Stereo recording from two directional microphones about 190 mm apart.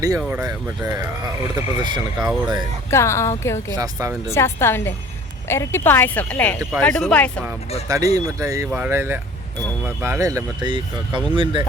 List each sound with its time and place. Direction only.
0.2 s speech: 5° right (ahead or behind)
0.4 s speech: 20° right (ahead or behind)
2.9 s speech: 15° left (ahead or behind)
7.9 s speech: 20° right (ahead or behind)